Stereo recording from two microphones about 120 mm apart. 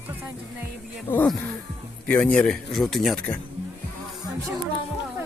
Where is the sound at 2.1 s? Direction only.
10° left (ahead or behind).